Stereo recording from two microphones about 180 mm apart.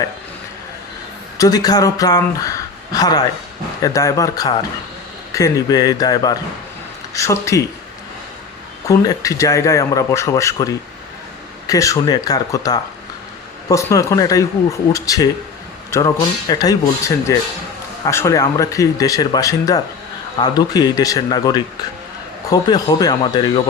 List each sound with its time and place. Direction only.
1.4 s speech: 20° left (ahead or behind)
8.9 s speech: 20° left (ahead or behind)
11.7 s speech: 20° left (ahead or behind)